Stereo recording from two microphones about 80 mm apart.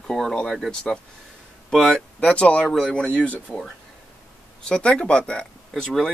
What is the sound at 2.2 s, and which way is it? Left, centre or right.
Speech, centre.